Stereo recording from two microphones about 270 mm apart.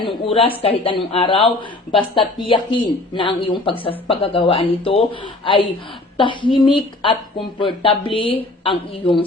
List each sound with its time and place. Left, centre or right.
0.0 s a woman's voice: centre